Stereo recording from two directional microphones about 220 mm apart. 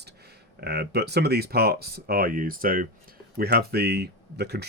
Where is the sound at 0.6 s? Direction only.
50° right (ahead or behind).